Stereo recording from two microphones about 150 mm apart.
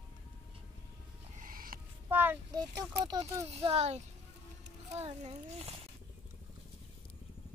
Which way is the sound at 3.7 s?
45° right (ahead or behind).